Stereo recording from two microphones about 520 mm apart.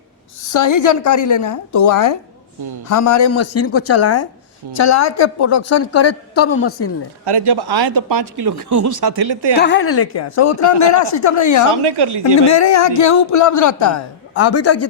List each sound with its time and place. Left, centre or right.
0.5 s a man's voice: left
7.3 s speech: right
9.6 s a man's voice: left
11.7 s speech: right
12.5 s a man's voice: left